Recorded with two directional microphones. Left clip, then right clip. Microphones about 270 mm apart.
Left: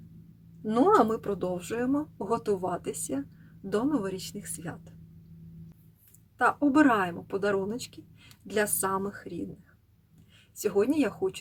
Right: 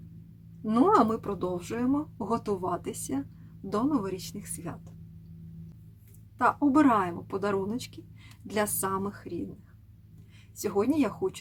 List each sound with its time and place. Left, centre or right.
0.7 s a woman's voice: centre
6.4 s a woman's voice: centre
10.6 s a woman's voice: centre